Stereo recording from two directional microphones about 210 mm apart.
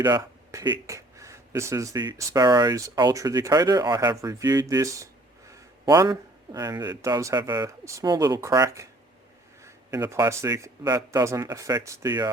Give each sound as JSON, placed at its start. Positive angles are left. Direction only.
{"t": 0.0, "sound": "speech", "side_deg": -20}